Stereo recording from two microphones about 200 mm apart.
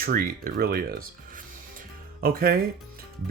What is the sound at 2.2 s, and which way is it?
Speech, 50° right (ahead or behind).